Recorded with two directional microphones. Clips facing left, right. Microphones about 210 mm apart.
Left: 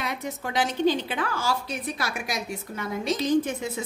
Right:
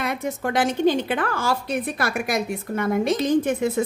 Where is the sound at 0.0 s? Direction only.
55° right (ahead or behind).